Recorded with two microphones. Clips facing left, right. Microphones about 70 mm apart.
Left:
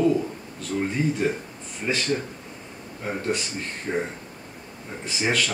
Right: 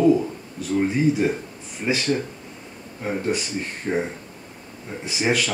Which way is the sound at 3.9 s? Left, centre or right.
Right.